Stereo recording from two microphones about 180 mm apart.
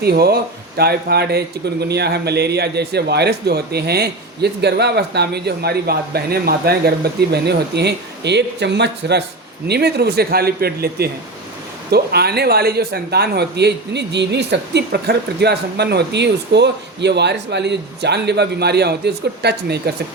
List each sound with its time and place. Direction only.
0.0 s speech: 60° right (ahead or behind)